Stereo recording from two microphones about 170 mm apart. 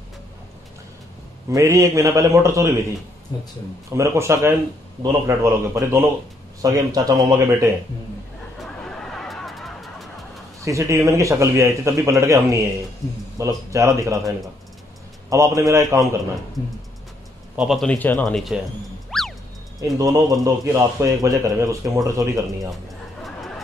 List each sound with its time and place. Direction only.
1.5 s a man's voice: 20° right (ahead or behind)
3.9 s a man's voice: 15° right (ahead or behind)
8.5 s a sound: 5° left (ahead or behind)
10.6 s a man's voice: 20° right (ahead or behind)
17.6 s speech: centre (ahead or behind)
19.0 s music: centre (ahead or behind)
20.0 s speech: 20° right (ahead or behind)
23.2 s a sound: centre (ahead or behind)